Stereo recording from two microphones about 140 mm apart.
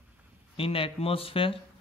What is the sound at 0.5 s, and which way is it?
Speech, 40° left (ahead or behind).